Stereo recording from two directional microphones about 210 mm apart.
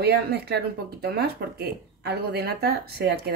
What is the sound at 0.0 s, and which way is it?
Speech, 50° right (ahead or behind).